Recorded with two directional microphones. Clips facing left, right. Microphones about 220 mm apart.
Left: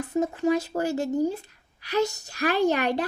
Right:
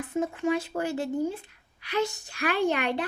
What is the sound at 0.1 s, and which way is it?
Speech, 40° left (ahead or behind).